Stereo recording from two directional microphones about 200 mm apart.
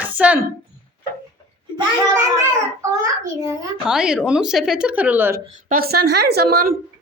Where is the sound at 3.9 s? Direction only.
5° right (ahead or behind).